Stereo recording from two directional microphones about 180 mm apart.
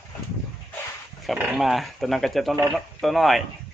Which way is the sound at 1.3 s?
Centre (ahead or behind).